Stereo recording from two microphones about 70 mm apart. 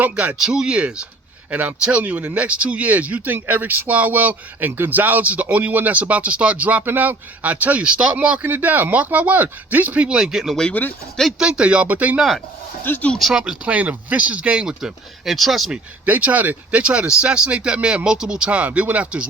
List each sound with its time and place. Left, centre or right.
0.0 s speech: right
0.3 s speech: centre
3.3 s speech: right; by 8.4 s centre
8.4 s speech: right
12.8 s speech: left
13.1 s speech: centre
13.4 s speech: centre
16.0 s speech: right